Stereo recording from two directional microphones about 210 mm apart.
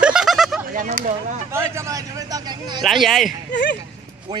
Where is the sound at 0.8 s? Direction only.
35° right (ahead or behind).